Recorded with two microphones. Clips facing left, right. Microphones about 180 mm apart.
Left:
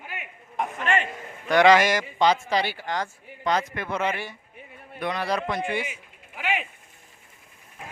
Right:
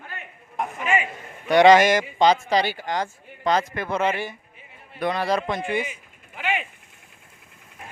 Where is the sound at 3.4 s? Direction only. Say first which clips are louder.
Right 3 dB; 35° right (ahead or behind).